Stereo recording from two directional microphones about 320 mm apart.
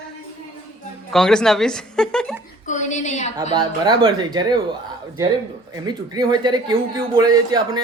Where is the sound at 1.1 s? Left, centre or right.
Centre.